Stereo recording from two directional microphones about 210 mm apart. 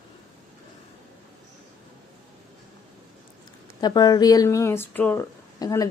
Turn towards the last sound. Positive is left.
turn(degrees=15)  # may be behind; listen again after turning